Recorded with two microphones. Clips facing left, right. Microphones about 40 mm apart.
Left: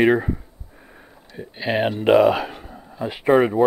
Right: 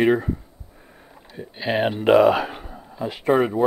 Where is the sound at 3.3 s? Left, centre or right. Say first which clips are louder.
Left 3 dB; centre.